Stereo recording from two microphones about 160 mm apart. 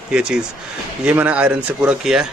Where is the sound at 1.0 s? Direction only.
10° right (ahead or behind).